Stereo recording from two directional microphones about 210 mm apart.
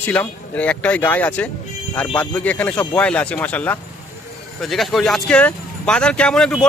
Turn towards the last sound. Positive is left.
turn(degrees=5)  # may be behind; listen again after turning